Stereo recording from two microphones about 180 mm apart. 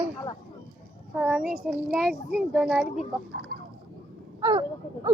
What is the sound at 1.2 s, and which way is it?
Speech, 5° right (ahead or behind).